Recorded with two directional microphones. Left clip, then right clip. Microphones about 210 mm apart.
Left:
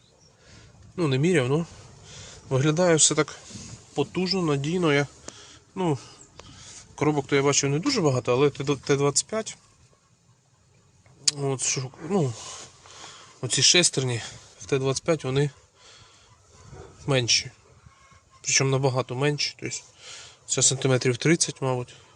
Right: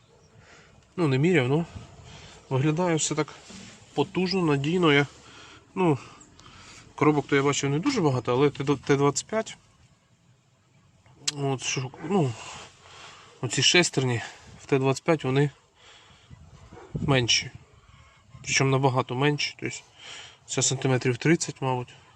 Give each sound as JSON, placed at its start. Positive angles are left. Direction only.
{"t": 0.9, "sound": "speech", "side_deg": 5}
{"t": 2.5, "sound": "speech", "side_deg": 20}
{"t": 3.9, "sound": "speech", "side_deg": 5}
{"t": 7.3, "sound": "speech", "side_deg": 15}
{"t": 11.3, "sound": "speech", "side_deg": 5}
{"t": 13.4, "sound": "speech", "side_deg": 0}
{"t": 17.1, "sound": "speech", "side_deg": 0}